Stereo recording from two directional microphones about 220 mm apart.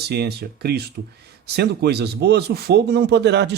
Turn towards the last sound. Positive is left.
turn(degrees=-50)  # may be behind; listen again after turning